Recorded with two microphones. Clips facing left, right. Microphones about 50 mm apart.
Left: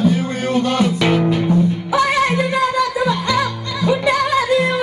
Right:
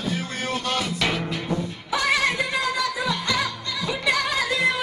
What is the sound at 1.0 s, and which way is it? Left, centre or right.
Music, centre.